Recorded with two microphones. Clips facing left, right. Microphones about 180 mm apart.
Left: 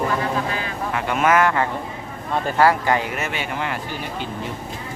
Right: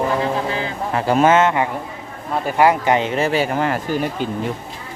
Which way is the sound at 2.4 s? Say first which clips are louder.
Right 2 dB; 20° right (ahead or behind).